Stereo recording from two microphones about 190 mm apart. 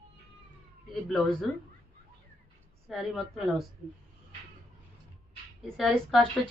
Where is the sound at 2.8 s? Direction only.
Centre (ahead or behind).